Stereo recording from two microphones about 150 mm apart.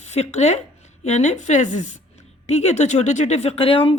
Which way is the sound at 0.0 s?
45° left (ahead or behind).